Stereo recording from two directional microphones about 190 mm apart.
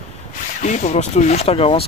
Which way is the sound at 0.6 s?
40° left (ahead or behind).